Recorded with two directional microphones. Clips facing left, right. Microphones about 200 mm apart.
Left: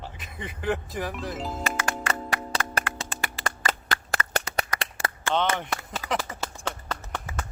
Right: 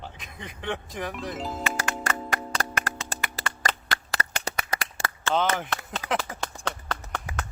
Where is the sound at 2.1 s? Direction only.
Centre (ahead or behind).